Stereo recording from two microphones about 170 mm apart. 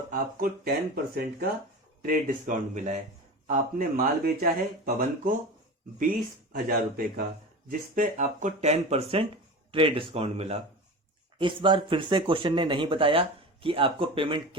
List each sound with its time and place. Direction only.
0.1 s a man's voice: 60° right (ahead or behind)
2.0 s a man's voice: 55° right (ahead or behind); by 14.4 s 30° right (ahead or behind)